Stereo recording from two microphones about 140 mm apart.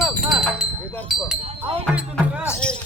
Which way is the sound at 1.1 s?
Centre (ahead or behind).